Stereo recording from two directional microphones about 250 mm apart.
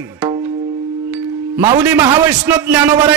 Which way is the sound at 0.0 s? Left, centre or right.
Centre.